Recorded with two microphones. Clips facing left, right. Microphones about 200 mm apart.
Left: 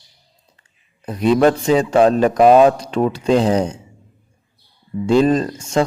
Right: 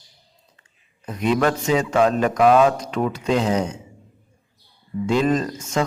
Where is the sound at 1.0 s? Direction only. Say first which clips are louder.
Left 6 dB; 35° left (ahead or behind).